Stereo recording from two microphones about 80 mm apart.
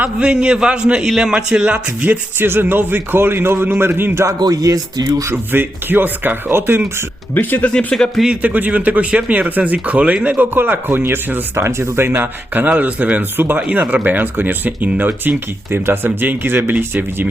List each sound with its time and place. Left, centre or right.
0.0 s speech: centre; by 4.4 s right
4.4 s speech: right
5.5 s speech: right
7.3 s speech: left
7.7 s speech: centre
8.2 s speech: centre